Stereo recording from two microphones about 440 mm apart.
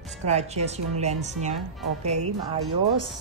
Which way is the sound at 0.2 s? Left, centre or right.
Centre.